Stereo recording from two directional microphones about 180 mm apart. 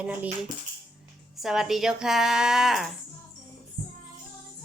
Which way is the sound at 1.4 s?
Centre (ahead or behind).